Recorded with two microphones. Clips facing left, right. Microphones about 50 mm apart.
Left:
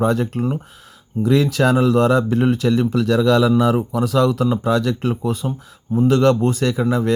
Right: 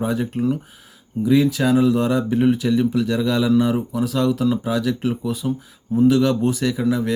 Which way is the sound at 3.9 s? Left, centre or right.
Left.